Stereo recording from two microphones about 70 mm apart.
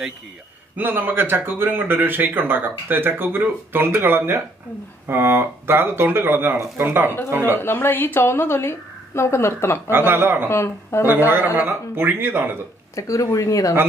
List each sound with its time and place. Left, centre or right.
0.7 s speech: right
7.2 s speech: right
7.5 s a woman's voice: left
9.8 s speech: right
10.5 s a woman's voice: left
11.1 s speech: right
12.9 s speech: left